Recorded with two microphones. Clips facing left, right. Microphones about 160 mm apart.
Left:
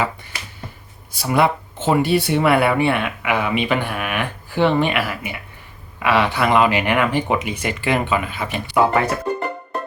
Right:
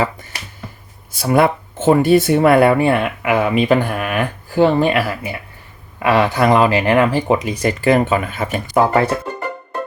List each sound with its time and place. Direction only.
1.2 s speech: 50° right (ahead or behind)